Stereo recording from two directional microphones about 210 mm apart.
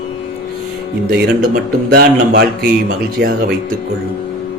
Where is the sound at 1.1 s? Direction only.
45° right (ahead or behind).